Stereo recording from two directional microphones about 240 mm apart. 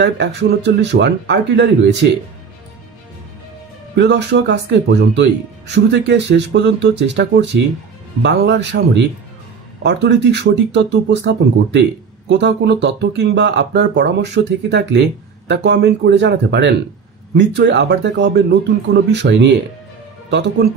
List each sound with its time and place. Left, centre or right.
0.0 s speech: right
3.9 s speech: right